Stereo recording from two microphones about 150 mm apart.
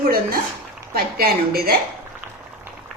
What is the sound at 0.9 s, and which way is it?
Speech, 90° right.